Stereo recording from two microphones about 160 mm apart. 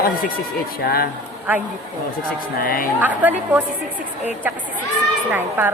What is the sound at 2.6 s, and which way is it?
Speech, 60° left (ahead or behind).